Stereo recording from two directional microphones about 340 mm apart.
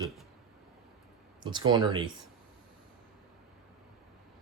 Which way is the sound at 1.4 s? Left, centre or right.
Centre.